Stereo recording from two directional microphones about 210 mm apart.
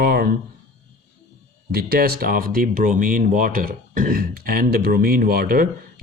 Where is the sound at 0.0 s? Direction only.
45° right (ahead or behind).